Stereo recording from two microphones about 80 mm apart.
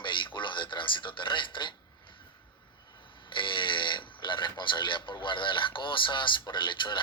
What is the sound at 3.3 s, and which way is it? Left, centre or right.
Speech, left.